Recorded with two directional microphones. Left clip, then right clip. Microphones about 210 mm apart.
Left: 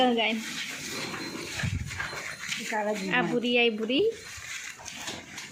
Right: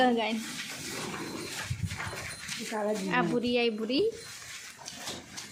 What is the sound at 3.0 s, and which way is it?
Speech, centre (ahead or behind).